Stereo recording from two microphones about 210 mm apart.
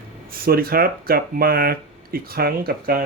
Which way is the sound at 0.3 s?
45° right (ahead or behind).